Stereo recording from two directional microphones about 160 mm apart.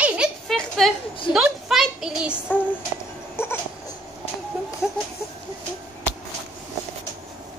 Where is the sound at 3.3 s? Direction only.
15° left (ahead or behind).